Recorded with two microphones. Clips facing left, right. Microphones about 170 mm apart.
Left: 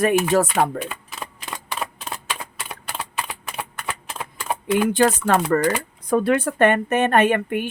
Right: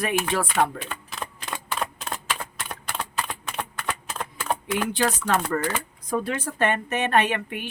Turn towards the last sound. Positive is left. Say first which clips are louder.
# left 7 dB
turn(degrees=50)  # may be behind; listen again after turning